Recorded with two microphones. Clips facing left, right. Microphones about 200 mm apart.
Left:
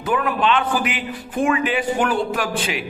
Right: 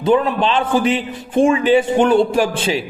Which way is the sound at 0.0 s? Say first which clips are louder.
Right 5 dB; 25° right (ahead or behind).